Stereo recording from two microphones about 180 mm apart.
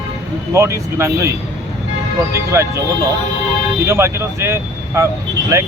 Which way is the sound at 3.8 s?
15° right (ahead or behind).